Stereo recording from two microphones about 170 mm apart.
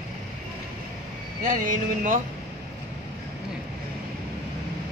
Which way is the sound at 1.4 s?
50° right (ahead or behind).